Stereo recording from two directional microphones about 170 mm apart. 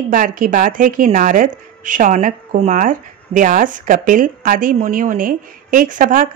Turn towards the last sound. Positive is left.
turn(degrees=-50)  # may be behind; listen again after turning